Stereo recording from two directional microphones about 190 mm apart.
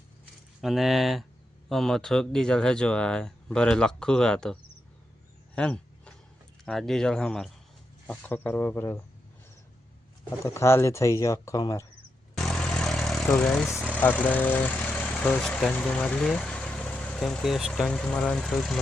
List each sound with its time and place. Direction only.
0.6 s speech: centre (ahead or behind)
5.5 s a sound: 5° left (ahead or behind)
6.7 s speech: centre (ahead or behind)
10.4 s speech: 15° left (ahead or behind)
12.4 s vehicle: 5° left (ahead or behind)
14.0 s speech: 10° left (ahead or behind)